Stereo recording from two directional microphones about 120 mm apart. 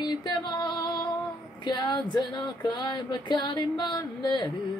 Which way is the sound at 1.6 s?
35° left (ahead or behind).